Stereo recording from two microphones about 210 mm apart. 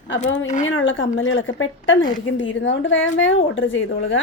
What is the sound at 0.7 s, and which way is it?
A woman's voice, 65° left (ahead or behind).